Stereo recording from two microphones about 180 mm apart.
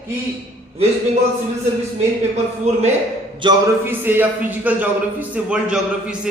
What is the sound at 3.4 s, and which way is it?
A man's voice, 15° right (ahead or behind).